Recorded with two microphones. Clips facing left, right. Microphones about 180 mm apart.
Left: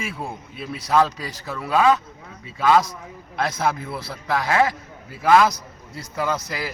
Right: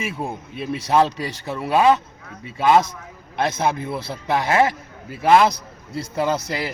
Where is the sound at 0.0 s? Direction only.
20° right (ahead or behind).